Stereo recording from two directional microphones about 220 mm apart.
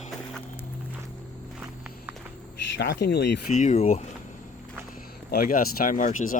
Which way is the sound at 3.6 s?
30° left (ahead or behind).